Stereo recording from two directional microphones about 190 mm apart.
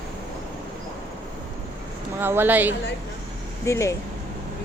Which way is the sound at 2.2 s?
10° right (ahead or behind).